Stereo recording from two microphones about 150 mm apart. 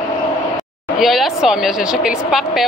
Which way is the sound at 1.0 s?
Centre (ahead or behind).